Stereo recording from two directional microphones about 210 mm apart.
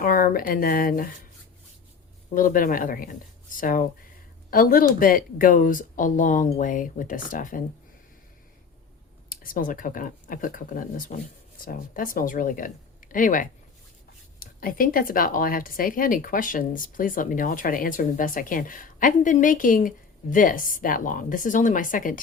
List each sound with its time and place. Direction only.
0.0 s speech: 45° left (ahead or behind)
2.3 s speech: 40° left (ahead or behind)
9.3 s speech: 40° left (ahead or behind)